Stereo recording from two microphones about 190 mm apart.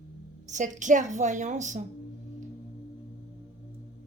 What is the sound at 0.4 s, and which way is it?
A woman's voice, 40° right (ahead or behind).